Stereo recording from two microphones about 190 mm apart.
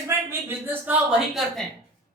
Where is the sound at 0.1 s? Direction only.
10° right (ahead or behind).